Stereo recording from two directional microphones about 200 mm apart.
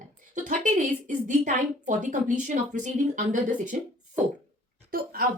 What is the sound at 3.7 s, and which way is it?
Speech, 45° right (ahead or behind).